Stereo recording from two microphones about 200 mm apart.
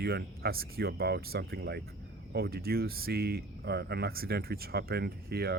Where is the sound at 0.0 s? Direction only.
50° right (ahead or behind).